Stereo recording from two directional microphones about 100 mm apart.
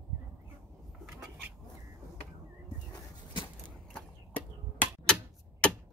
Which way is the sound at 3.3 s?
55° left (ahead or behind).